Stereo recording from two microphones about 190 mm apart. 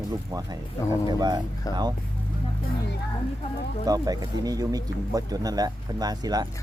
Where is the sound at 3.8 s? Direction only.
20° right (ahead or behind).